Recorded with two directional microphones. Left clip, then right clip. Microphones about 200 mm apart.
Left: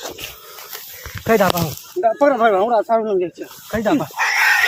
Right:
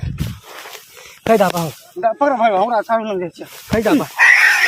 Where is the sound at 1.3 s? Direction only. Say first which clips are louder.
Right 2 dB; 35° right (ahead or behind).